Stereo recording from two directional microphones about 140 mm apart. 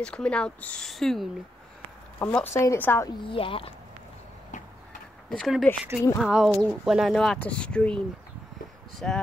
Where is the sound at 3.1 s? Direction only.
35° left (ahead or behind).